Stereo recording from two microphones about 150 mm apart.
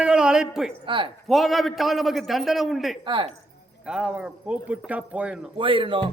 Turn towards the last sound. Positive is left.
turn(degrees=-35)  # may be behind; listen again after turning